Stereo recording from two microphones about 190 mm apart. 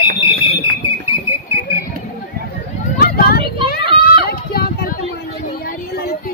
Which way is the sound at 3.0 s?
55° left (ahead or behind).